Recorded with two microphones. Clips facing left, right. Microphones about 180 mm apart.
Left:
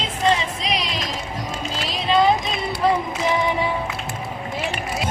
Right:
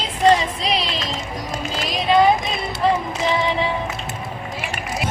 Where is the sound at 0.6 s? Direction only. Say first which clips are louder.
Right 2 dB; 30° right (ahead or behind).